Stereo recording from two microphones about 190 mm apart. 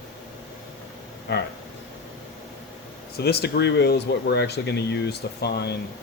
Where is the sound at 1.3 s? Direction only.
65° left (ahead or behind).